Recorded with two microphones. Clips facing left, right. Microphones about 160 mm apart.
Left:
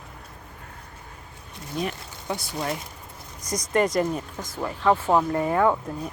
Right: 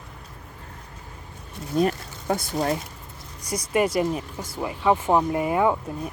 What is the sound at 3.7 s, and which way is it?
Speech, 10° right (ahead or behind).